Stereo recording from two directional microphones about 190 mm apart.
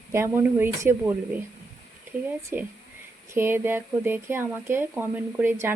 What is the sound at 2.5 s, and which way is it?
Speech, 10° right (ahead or behind).